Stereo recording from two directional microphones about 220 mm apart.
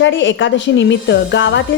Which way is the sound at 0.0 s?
55° left (ahead or behind).